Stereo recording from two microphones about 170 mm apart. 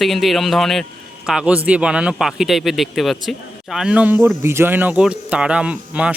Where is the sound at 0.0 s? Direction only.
Centre (ahead or behind).